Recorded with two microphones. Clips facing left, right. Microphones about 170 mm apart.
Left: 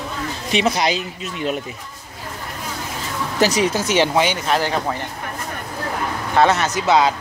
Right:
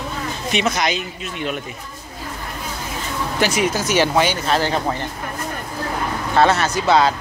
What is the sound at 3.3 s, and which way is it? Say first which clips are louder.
Speech: left 2 dB; 35° left (ahead or behind).